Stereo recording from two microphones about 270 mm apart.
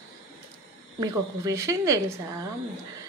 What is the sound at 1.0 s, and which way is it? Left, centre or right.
A woman's voice, centre.